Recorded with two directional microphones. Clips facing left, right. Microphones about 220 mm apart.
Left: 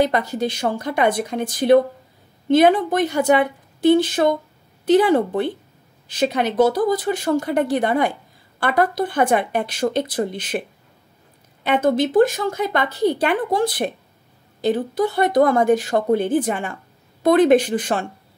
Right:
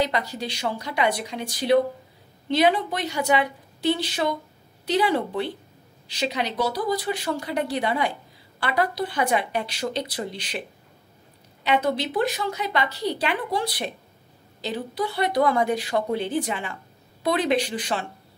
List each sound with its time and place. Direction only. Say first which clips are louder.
0.0 s speech: left 6 dB; 50° left (ahead or behind)
11.6 s speech: left 5 dB; 50° left (ahead or behind)